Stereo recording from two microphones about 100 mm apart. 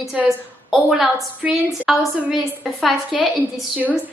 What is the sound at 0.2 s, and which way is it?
A woman's voice, 5° right (ahead or behind).